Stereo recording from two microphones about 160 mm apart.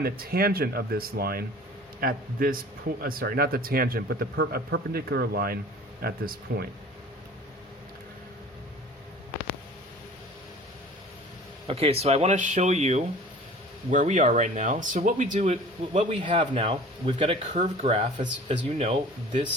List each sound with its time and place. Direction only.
0.0 s a man's voice: 70° right (ahead or behind)
11.7 s speech: 40° right (ahead or behind)
16.6 s speech: 35° right (ahead or behind)